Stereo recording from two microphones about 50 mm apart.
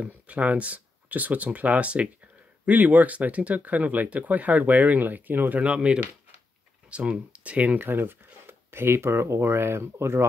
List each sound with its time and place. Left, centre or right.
0.0 s speech: right
5.6 s speech: right
7.8 s speech: right